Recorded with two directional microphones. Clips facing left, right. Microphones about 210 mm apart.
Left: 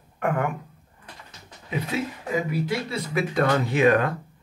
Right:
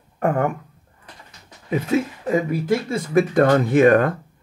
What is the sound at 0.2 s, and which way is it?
Speech, 40° right (ahead or behind).